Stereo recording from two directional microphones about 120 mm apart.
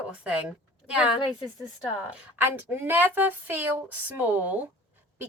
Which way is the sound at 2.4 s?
15° right (ahead or behind).